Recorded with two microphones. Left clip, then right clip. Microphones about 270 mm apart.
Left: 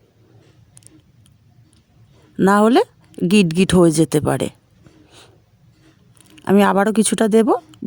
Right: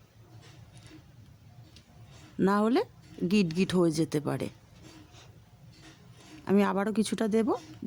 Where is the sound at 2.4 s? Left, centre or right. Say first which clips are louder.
Left 13 dB; left.